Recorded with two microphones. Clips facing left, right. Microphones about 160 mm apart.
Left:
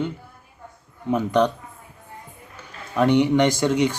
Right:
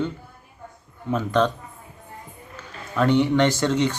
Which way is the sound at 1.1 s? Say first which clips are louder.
Left 2 dB; 15° left (ahead or behind).